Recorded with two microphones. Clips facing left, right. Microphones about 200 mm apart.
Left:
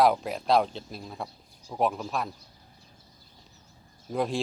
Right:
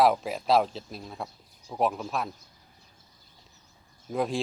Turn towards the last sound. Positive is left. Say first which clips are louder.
# even
turn(degrees=0)  # may be behind; listen again after turning